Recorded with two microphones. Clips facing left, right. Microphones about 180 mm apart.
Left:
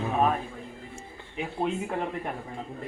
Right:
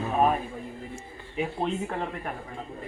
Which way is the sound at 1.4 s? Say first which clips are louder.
Right 4 dB; 5° right (ahead or behind).